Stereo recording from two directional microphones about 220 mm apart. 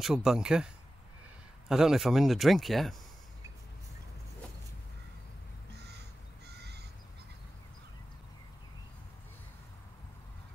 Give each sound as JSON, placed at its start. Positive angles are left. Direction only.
{"t": 0.0, "sound": "speech", "side_deg": 0}
{"t": 1.7, "sound": "speech", "side_deg": 0}
{"t": 6.4, "sound": "crow", "side_deg": -50}